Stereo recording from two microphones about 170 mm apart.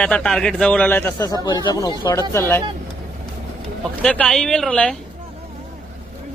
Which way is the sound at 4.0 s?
5° left (ahead or behind).